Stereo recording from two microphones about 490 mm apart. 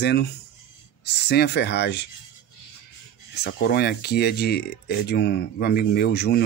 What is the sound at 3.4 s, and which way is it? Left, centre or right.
Speech, centre.